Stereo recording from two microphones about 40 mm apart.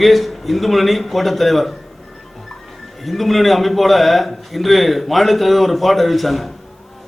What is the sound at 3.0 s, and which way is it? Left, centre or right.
A man's voice, centre.